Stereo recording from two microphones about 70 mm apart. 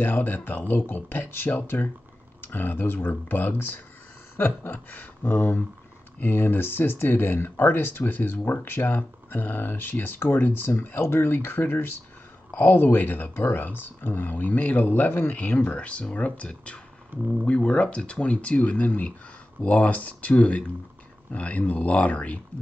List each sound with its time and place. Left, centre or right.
0.0 s speech: left